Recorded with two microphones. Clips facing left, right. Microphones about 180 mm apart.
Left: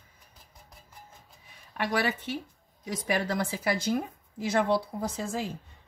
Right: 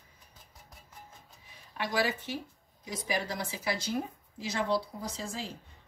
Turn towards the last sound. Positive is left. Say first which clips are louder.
# left 6 dB
turn(degrees=55)  # may be behind; listen again after turning